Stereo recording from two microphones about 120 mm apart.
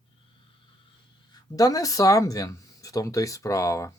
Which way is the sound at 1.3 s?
30° left (ahead or behind).